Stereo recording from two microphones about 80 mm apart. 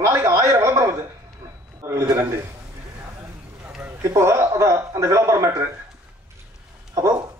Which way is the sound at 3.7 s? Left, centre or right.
Centre.